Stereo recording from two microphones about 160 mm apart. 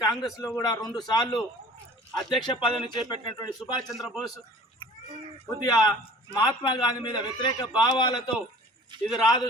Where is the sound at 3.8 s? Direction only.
Centre (ahead or behind).